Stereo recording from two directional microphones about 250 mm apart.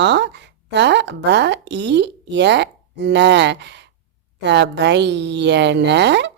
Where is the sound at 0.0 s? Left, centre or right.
Right.